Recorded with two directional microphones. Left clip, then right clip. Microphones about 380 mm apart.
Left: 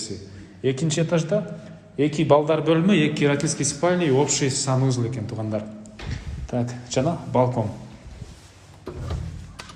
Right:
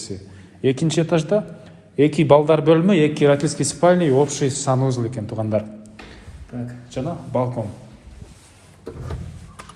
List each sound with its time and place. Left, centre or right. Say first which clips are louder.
0.6 s a man's voice: right 4 dB; centre
6.5 s speech: left 6 dB; centre